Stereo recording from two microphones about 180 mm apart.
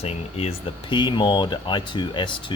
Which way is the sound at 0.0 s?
35° left (ahead or behind).